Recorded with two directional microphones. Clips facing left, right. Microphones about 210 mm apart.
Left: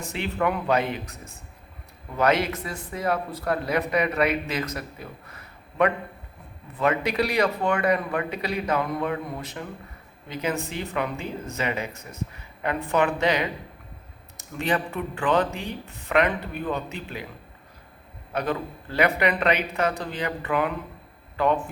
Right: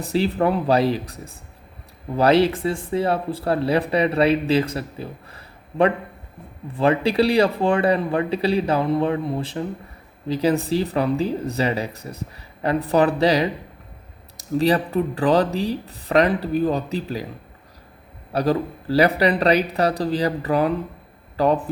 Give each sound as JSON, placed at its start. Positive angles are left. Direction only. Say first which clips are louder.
{"t": 0.0, "sound": "speech", "louder": "right 6 dB", "side_deg": -35}
{"t": 18.3, "sound": "speech", "louder": "right 7 dB", "side_deg": -35}